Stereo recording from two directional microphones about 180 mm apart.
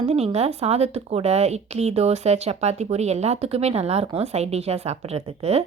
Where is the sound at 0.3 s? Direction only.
35° right (ahead or behind).